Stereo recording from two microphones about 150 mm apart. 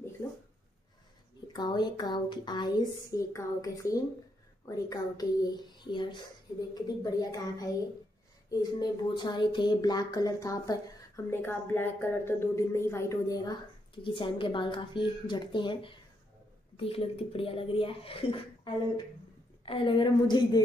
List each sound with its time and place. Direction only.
1.5 s speech: 30° left (ahead or behind)